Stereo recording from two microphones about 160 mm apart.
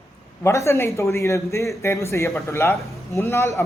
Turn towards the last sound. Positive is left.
turn(degrees=20)  # may be behind; listen again after turning